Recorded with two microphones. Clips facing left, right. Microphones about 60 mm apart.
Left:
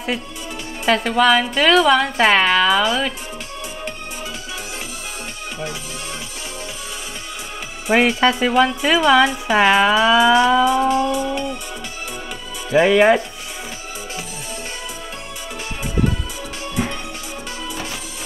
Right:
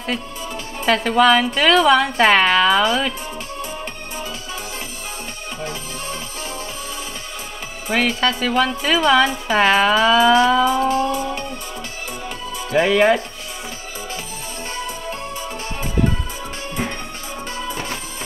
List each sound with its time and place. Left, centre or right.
0.8 s a woman's voice: centre
7.9 s speech: left
10.8 s music: left
11.1 s music: right
12.7 s speech: centre